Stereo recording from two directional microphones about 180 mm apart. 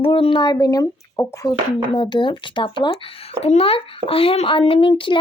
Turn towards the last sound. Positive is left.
turn(degrees=30)  # may be behind; listen again after turning